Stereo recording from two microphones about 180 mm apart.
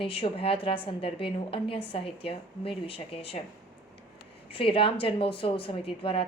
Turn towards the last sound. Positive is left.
turn(degrees=30)  # may be behind; listen again after turning